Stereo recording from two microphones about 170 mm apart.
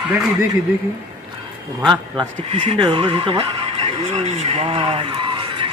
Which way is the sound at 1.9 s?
25° right (ahead or behind).